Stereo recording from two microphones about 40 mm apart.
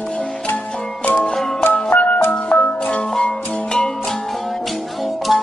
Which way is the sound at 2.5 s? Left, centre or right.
Left.